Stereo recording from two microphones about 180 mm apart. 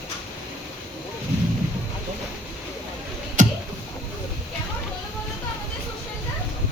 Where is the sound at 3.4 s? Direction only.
45° right (ahead or behind).